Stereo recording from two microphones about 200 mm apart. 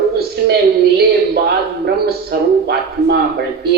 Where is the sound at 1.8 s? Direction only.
55° right (ahead or behind).